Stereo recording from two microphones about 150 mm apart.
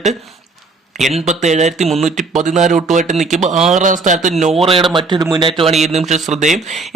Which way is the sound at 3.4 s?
55° right (ahead or behind).